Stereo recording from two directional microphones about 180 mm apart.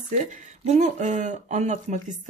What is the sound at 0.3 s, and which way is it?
Speech, 40° right (ahead or behind).